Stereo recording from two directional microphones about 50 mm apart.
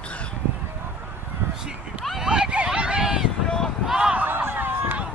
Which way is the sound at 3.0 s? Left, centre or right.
Centre.